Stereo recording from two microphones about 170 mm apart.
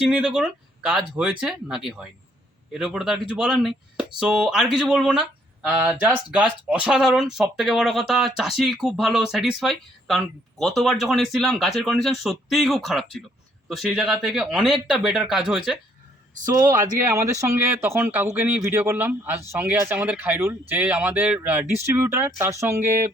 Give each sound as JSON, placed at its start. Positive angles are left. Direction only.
{"t": 0.1, "sound": "speech", "side_deg": -5}
{"t": 16.5, "sound": "speech", "side_deg": -20}